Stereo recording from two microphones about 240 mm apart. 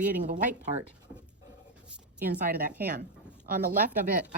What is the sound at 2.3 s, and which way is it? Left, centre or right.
Speech, right.